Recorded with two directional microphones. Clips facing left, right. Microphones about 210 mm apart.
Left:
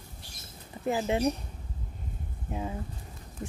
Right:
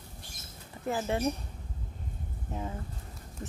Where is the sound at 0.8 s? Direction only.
15° left (ahead or behind).